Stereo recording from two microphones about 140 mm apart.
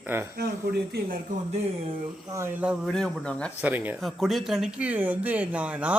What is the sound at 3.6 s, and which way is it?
Speech, 10° right (ahead or behind).